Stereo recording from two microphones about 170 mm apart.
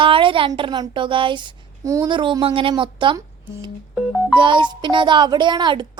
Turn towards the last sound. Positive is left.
turn(degrees=-25)  # may be behind; listen again after turning